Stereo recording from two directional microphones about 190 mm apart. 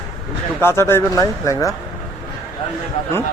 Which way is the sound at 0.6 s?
15° left (ahead or behind).